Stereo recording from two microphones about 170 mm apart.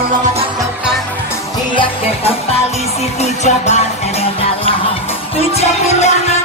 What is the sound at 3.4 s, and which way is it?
Music, 40° left (ahead or behind).